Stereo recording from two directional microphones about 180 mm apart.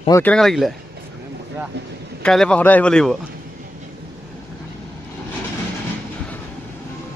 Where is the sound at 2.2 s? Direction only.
5° left (ahead or behind).